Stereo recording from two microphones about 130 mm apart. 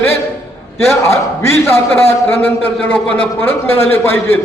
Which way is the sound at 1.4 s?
20° left (ahead or behind).